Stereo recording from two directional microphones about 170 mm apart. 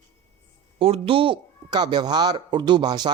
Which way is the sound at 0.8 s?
35° right (ahead or behind).